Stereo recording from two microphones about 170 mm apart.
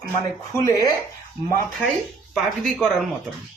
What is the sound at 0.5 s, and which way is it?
Speech, 20° left (ahead or behind).